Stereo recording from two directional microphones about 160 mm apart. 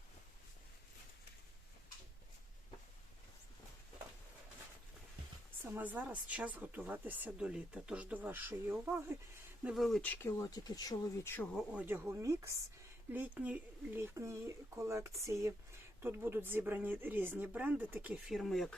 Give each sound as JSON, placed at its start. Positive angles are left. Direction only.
{"t": 5.6, "sound": "speech", "side_deg": -10}
{"t": 9.6, "sound": "speech", "side_deg": 0}
{"t": 11.5, "sound": "speech", "side_deg": -5}